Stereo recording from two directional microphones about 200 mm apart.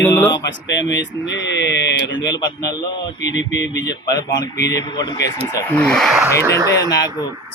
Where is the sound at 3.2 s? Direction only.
60° left (ahead or behind).